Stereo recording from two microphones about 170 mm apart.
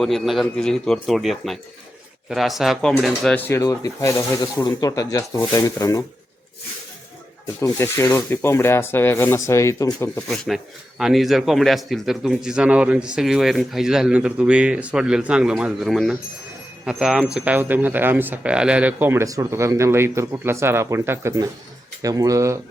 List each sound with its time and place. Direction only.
0.0 s speech: centre (ahead or behind); by 6.1 s 20° left (ahead or behind)
7.6 s speech: 20° left (ahead or behind)
10.2 s speech: 5° left (ahead or behind); by 22.5 s 20° right (ahead or behind)